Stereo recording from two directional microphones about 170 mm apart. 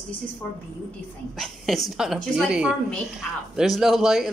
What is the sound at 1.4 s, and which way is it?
Speech, centre (ahead or behind).